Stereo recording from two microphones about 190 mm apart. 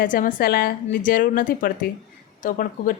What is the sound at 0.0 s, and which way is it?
Speech, 45° left (ahead or behind).